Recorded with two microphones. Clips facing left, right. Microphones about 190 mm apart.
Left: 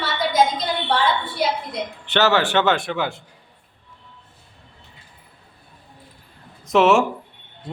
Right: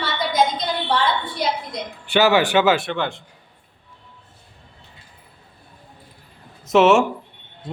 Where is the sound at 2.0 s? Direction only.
10° right (ahead or behind).